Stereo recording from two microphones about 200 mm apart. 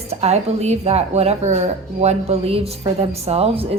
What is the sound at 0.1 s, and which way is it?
A woman's voice, 30° right (ahead or behind).